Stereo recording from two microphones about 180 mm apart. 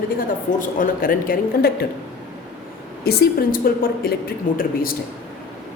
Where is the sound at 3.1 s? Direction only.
60° left (ahead or behind).